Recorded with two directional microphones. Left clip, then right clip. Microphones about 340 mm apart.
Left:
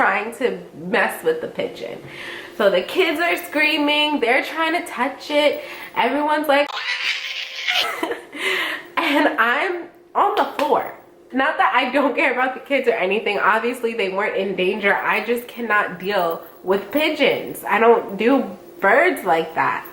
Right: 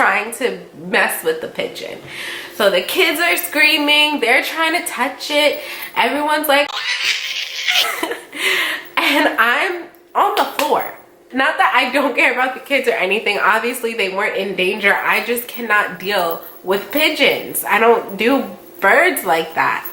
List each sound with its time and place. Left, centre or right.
0.0 s a sound: centre
0.9 s a woman's voice: centre
7.9 s a sound: centre
9.0 s a woman's voice: centre
16.2 s speech: centre
16.7 s a woman's voice: centre